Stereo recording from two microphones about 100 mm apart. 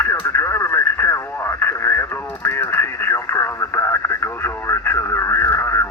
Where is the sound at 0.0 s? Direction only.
25° left (ahead or behind).